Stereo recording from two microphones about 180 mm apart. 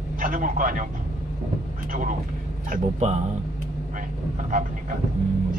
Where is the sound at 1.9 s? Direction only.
45° right (ahead or behind).